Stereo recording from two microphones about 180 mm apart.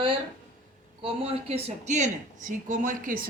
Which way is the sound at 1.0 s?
35° right (ahead or behind).